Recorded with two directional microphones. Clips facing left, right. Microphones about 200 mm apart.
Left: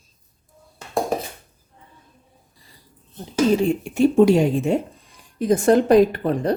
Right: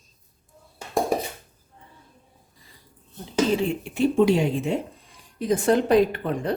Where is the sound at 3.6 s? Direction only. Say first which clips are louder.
Left 5 dB; 45° left (ahead or behind).